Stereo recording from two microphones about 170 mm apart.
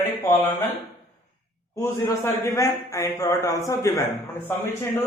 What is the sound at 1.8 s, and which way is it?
A man's voice, 15° left (ahead or behind).